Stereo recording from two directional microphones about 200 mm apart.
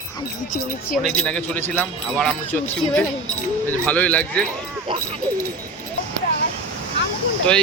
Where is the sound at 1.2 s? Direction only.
5° left (ahead or behind).